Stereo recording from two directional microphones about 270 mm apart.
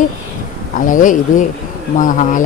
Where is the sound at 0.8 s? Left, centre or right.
Left.